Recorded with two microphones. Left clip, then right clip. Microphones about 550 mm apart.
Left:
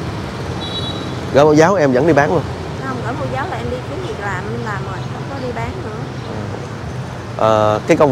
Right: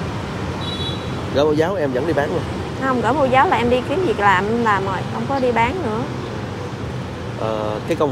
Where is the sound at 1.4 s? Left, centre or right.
Left.